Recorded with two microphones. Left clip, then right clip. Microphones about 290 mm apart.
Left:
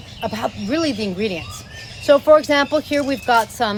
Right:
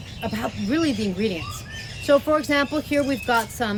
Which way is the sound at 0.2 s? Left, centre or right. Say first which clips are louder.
Left 5 dB; centre.